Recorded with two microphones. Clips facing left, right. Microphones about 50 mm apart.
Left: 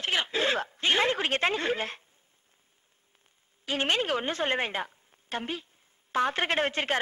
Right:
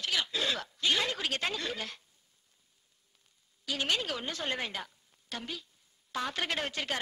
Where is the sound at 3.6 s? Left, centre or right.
Left.